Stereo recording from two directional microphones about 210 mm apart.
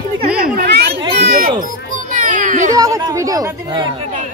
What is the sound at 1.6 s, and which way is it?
Children playing, 35° right (ahead or behind).